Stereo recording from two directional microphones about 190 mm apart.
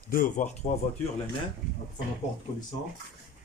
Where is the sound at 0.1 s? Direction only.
45° left (ahead or behind).